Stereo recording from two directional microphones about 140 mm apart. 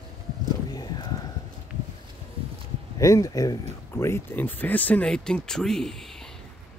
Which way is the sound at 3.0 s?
25° left (ahead or behind).